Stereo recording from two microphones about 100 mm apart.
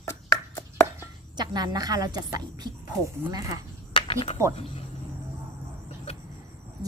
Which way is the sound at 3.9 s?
60° left (ahead or behind).